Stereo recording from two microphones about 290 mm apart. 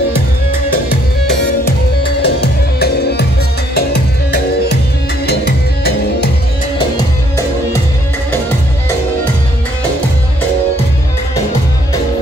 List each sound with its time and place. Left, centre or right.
2.2 s music: left